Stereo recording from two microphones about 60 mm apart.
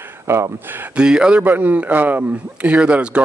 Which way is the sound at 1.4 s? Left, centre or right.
Right.